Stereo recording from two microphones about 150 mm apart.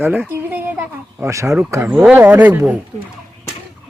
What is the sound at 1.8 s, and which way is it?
Speech, 5° right (ahead or behind).